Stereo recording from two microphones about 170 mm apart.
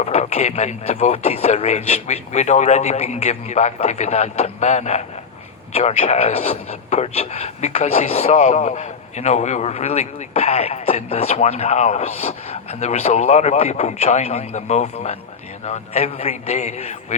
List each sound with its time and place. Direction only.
0.0 s speech: 40° left (ahead or behind)